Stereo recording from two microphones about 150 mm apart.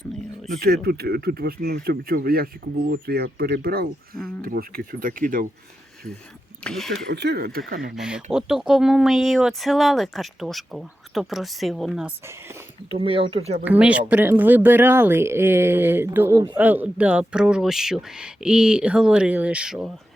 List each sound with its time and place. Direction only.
0.6 s speech: 90° right
4.4 s speech: 75° right (ahead or behind)
6.7 s speech: centre (ahead or behind)
7.2 s speech: 90° right
7.9 s speech: 5° right (ahead or behind)
12.9 s speech: 35° right (ahead or behind)
13.7 s speech: 10° right (ahead or behind)